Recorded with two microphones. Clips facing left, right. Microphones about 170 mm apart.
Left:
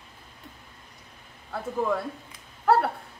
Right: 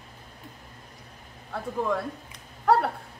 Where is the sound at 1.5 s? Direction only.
Centre (ahead or behind).